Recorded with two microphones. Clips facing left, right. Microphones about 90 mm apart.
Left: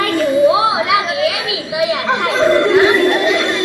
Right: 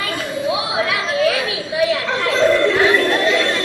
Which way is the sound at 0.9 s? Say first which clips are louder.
Left 2 dB; 15° left (ahead or behind).